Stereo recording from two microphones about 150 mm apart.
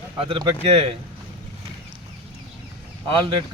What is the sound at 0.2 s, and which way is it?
Speech, 35° right (ahead or behind).